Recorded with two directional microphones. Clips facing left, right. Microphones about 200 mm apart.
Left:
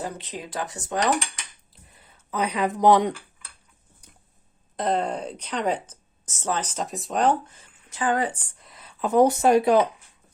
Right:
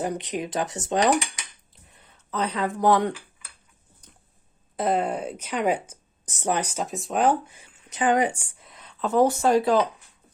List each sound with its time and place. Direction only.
0.0 s speech: 15° right (ahead or behind)
1.9 s speech: 5° left (ahead or behind)
4.0 s a sound: 10° left (ahead or behind)
4.8 s speech: 5° right (ahead or behind); by 9.8 s 20° left (ahead or behind)